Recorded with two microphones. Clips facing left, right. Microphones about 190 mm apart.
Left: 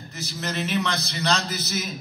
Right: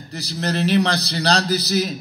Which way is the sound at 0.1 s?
35° right (ahead or behind).